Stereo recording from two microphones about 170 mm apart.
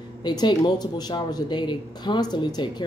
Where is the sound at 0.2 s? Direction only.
25° left (ahead or behind).